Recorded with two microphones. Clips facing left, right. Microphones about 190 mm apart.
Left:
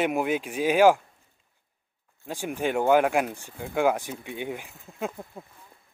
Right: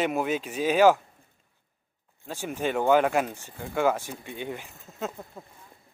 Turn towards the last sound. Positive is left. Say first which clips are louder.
# left 2 dB
turn(degrees=10)  # may be behind; listen again after turning